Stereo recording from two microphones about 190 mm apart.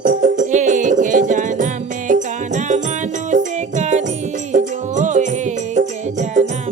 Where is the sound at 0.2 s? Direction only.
40° right (ahead or behind).